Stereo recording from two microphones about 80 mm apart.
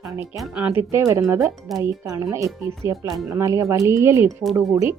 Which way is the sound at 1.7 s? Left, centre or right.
Centre.